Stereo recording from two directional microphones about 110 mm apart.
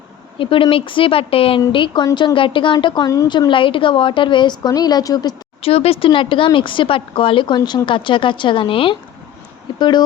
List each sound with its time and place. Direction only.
0.3 s speech: 55° left (ahead or behind)
1.7 s speech: 45° left (ahead or behind)
5.6 s speech: 65° left (ahead or behind); by 10.0 s 40° left (ahead or behind)